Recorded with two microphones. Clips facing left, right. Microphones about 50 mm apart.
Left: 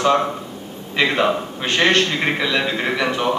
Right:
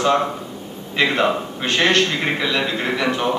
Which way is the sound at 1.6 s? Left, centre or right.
Left.